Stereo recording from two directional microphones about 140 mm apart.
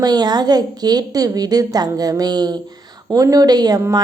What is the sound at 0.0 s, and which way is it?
A woman's voice, 30° right (ahead or behind).